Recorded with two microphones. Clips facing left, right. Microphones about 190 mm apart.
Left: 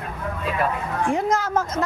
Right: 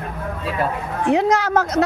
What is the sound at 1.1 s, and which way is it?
Speech, 75° right (ahead or behind).